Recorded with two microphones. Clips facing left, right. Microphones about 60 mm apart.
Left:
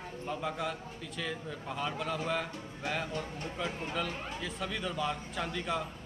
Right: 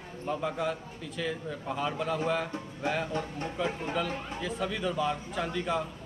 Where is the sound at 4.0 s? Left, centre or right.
Centre.